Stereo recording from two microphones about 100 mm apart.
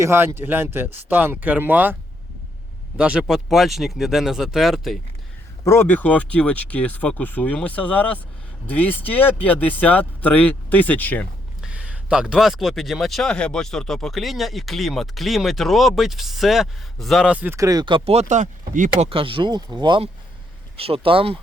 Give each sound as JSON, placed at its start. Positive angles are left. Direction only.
{"t": 0.0, "sound": "speech", "side_deg": -25}
{"t": 3.0, "sound": "speech", "side_deg": -10}
{"t": 5.6, "sound": "speech", "side_deg": 25}
{"t": 11.6, "sound": "speech", "side_deg": -10}
{"t": 17.2, "sound": "speech", "side_deg": -15}
{"t": 17.5, "sound": "speech", "side_deg": -35}
{"t": 17.8, "sound": "speech", "side_deg": -65}
{"t": 18.9, "sound": "speech", "side_deg": -65}
{"t": 20.7, "sound": "speech", "side_deg": -70}